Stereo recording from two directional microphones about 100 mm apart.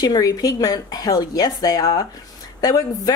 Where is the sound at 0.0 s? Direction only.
40° left (ahead or behind).